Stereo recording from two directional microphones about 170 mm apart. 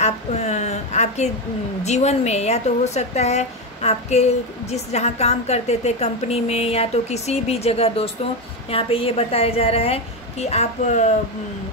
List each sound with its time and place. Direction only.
0.0 s a woman's voice: 40° left (ahead or behind)